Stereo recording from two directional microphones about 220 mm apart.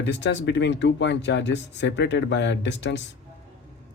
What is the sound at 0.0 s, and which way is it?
Speech, 55° left (ahead or behind).